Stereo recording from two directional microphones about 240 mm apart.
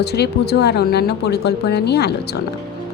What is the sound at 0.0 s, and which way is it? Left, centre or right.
Speech, left.